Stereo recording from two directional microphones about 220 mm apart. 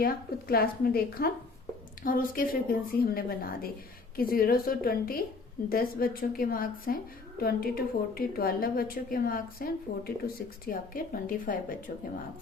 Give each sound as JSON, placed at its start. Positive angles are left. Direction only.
{"t": 0.0, "sound": "a woman's voice", "side_deg": 45}